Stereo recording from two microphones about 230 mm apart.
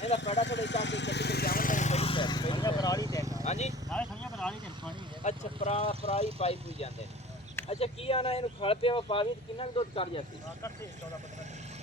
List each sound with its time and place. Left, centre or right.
0.2 s vehicle: left; by 3.2 s centre
3.4 s vehicle: left
3.8 s vehicle: centre
5.2 s speech: left